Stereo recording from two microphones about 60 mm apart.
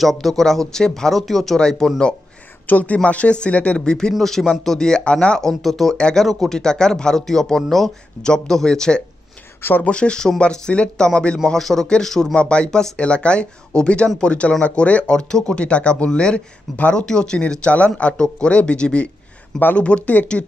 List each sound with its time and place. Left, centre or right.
0.0 s speech: centre
2.6 s speech: left
5.5 s speech: centre
5.9 s speech: centre
9.6 s speech: left
9.8 s speech: centre